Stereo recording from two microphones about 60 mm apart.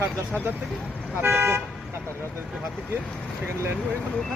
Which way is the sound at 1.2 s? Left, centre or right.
Right.